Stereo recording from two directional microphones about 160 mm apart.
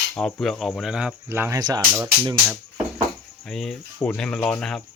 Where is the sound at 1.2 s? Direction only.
15° right (ahead or behind).